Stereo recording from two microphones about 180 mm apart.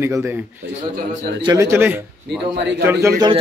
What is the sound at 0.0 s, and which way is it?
A man's voice, 15° right (ahead or behind).